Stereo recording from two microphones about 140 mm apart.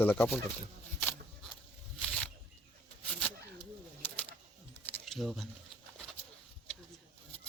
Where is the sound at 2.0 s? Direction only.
5° left (ahead or behind).